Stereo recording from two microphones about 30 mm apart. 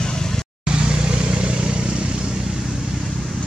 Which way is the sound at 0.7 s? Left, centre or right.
Right.